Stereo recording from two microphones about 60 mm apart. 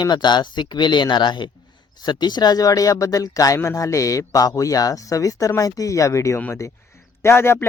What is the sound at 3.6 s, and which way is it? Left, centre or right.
Speech, left.